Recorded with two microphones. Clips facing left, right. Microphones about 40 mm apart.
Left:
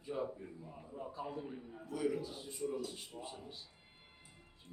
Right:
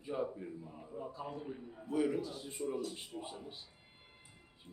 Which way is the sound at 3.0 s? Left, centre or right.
Right.